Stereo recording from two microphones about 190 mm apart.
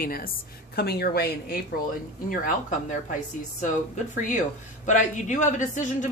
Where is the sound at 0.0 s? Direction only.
50° left (ahead or behind).